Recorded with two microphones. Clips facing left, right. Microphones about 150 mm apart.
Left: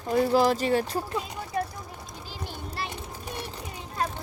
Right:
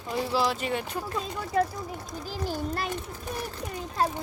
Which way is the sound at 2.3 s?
45° right (ahead or behind).